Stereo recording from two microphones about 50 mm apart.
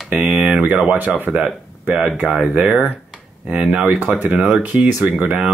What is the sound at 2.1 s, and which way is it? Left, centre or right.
Speech, right.